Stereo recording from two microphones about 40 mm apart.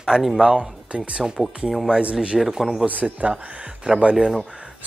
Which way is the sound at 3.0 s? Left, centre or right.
Right.